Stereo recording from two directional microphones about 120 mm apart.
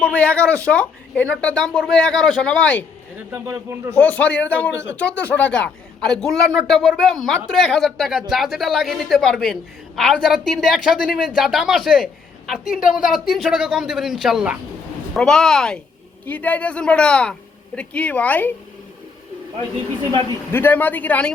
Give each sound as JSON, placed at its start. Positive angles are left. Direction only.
{"t": 0.0, "sound": "a woman's voice", "side_deg": 10}
{"t": 3.3, "sound": "speech", "side_deg": -20}
{"t": 3.9, "sound": "a woman's voice", "side_deg": 15}
{"t": 20.5, "sound": "speech", "side_deg": 15}